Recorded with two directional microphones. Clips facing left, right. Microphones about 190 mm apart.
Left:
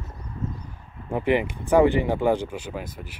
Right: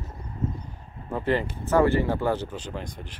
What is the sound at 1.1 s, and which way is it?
Speech, 15° left (ahead or behind).